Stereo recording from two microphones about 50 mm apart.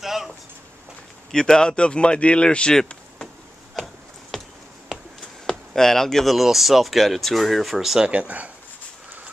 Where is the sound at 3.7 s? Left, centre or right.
Centre.